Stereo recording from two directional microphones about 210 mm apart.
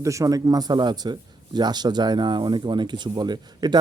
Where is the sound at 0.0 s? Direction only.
15° right (ahead or behind).